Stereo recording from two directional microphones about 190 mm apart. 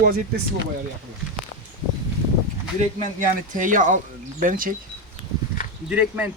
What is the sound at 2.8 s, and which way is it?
Speech, 40° right (ahead or behind).